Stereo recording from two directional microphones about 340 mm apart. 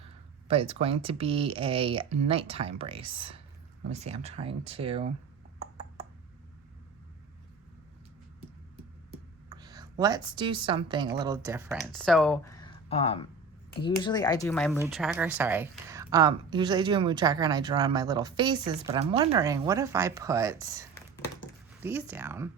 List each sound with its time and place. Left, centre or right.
0.0 s speech: centre
9.5 s a woman's voice: centre
21.8 s speech: centre